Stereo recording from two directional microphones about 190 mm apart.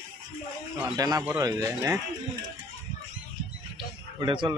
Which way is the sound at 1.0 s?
20° right (ahead or behind).